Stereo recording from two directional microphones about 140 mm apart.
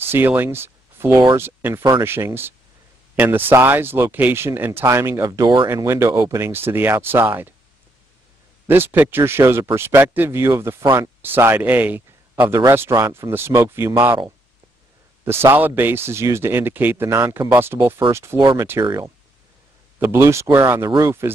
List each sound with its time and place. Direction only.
0.1 s speech: 15° right (ahead or behind)
8.6 s speech: 15° right (ahead or behind)
15.2 s speech: 15° right (ahead or behind)
20.0 s speech: 15° right (ahead or behind)